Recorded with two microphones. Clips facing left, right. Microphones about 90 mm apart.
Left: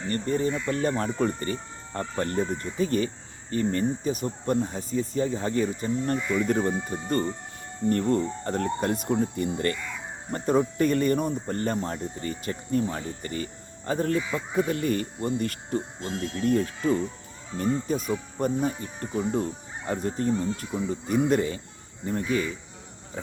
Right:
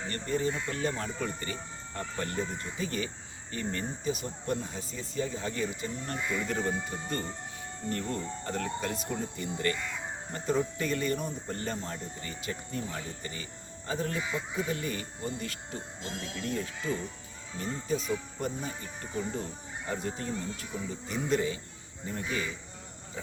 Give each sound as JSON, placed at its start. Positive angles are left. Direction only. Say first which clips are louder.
{"t": 0.1, "sound": "speech", "louder": "left 6 dB", "side_deg": 40}
{"t": 7.9, "sound": "speech", "louder": "left 11 dB", "side_deg": 40}